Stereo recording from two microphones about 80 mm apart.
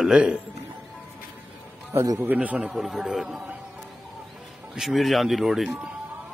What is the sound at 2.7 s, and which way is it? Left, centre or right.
Speech, centre.